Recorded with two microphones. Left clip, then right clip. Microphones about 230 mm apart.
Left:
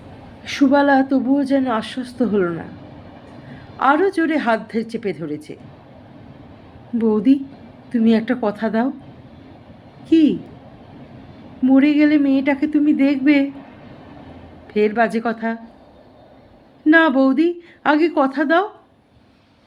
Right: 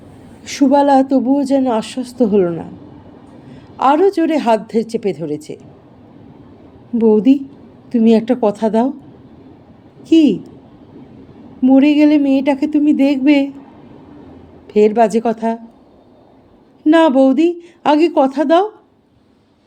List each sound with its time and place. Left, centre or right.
0.4 s speech: right
3.8 s speech: right
7.0 s speech: right
10.0 s speech: right
11.6 s speech: right
14.7 s speech: right
16.8 s speech: right